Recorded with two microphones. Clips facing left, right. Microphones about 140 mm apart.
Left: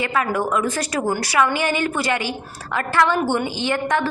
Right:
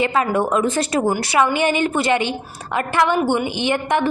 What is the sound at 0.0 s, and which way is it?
A woman's voice, 25° right (ahead or behind).